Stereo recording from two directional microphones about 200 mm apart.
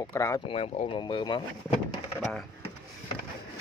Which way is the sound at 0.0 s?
15° left (ahead or behind).